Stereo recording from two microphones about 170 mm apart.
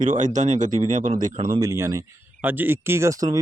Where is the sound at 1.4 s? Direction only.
20° right (ahead or behind).